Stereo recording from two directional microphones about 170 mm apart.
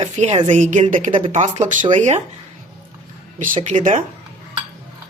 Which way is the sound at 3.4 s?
40° right (ahead or behind).